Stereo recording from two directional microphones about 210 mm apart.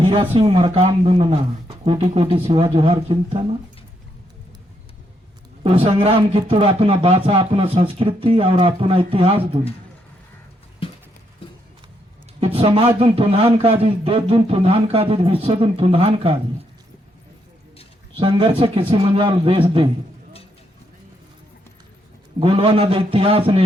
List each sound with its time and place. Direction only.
0.0 s a man's voice: 25° right (ahead or behind)
5.8 s a man's voice: 25° right (ahead or behind)
12.5 s a man's voice: 25° right (ahead or behind)
18.2 s a man's voice: 25° right (ahead or behind)
22.4 s a man's voice: 25° right (ahead or behind)